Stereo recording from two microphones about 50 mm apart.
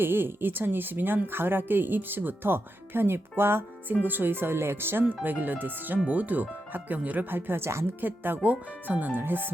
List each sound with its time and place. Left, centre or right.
0.0 s a woman's voice: right
5.0 s speech: right
8.0 s speech: right